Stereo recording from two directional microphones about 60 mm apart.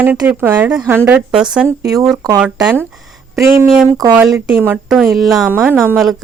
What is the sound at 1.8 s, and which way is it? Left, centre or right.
Speech, right.